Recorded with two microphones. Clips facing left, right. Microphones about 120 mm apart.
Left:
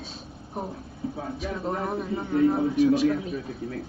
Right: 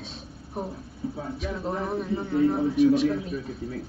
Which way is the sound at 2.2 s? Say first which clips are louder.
Left 2 dB; 15° left (ahead or behind).